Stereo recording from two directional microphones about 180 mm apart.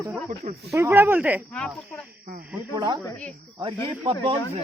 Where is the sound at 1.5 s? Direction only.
5° left (ahead or behind).